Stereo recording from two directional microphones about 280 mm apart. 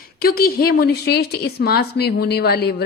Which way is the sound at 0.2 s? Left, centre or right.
Left.